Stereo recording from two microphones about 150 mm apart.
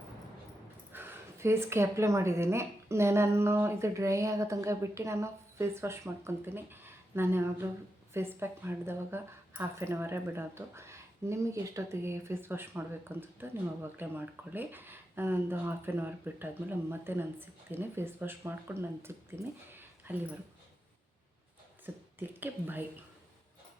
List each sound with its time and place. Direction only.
0.9 s speech: 15° right (ahead or behind)
19.7 s a sound: 15° right (ahead or behind)
21.8 s speech: 15° right (ahead or behind)